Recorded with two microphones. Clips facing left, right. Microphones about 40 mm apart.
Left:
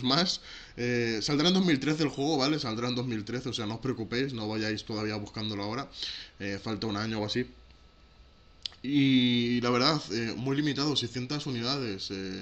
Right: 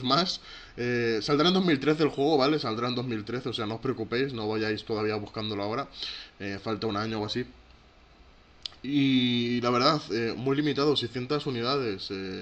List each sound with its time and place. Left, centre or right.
0.0 s speech: centre
8.6 s speech: centre